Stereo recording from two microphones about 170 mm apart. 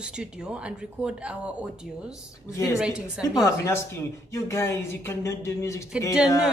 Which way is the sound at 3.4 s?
15° left (ahead or behind).